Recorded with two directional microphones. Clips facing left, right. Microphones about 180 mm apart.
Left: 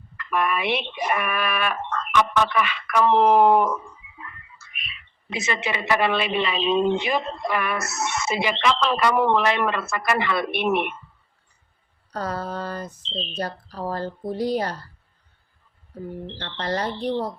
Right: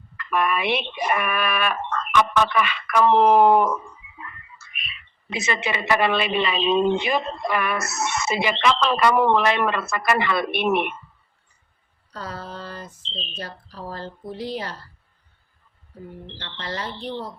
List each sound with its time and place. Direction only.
0.3 s a woman's voice: 70° right (ahead or behind)
5.3 s a woman's voice: 65° right (ahead or behind)
12.1 s speech: 45° left (ahead or behind)
16.4 s a woman's voice: 40° left (ahead or behind)